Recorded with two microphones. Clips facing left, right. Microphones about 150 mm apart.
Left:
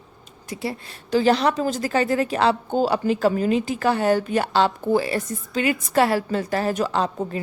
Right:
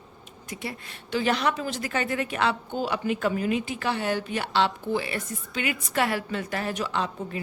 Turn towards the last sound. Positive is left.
turn(degrees=40)  # may be behind; listen again after turning